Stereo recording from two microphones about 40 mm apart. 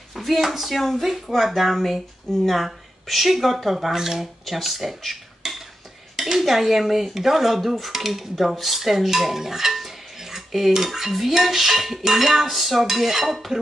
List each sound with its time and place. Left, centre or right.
0.1 s speech: centre
5.4 s cutlery: centre
6.1 s dishes: centre